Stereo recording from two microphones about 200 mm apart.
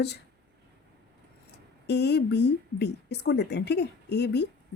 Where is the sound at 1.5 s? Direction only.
55° left (ahead or behind).